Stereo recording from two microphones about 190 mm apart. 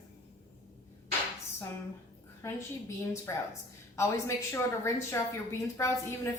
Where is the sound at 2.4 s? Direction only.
15° left (ahead or behind).